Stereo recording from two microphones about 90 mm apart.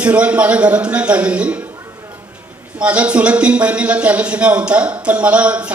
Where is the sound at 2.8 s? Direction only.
15° right (ahead or behind).